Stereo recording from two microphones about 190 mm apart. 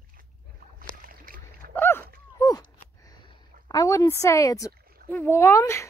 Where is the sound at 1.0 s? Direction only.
50° right (ahead or behind).